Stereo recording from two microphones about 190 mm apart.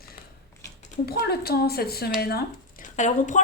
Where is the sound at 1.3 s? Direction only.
55° left (ahead or behind).